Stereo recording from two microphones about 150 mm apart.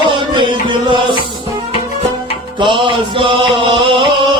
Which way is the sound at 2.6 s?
35° right (ahead or behind).